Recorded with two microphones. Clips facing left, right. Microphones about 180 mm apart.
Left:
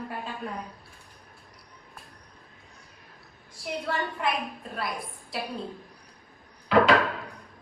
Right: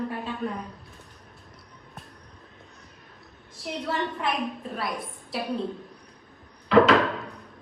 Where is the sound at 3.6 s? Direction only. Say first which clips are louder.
Right 1 dB; centre (ahead or behind).